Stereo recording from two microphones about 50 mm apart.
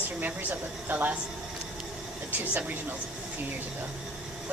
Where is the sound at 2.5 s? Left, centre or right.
Right.